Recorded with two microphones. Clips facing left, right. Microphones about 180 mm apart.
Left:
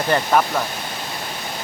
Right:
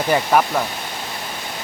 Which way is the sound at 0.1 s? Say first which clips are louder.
Right 1 dB; 5° right (ahead or behind).